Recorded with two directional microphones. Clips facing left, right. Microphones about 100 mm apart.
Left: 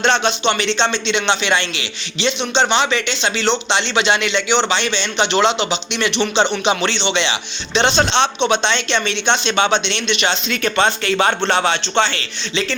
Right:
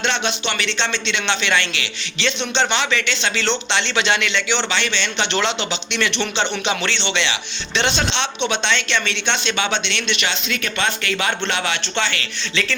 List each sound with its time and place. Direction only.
0.0 s speech: 35° left (ahead or behind)